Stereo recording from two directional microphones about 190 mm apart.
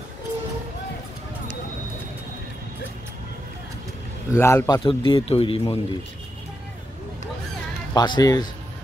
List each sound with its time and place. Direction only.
4.3 s a man's voice: 15° left (ahead or behind); by 5.8 s 30° left (ahead or behind)
7.9 s a man's voice: 20° left (ahead or behind)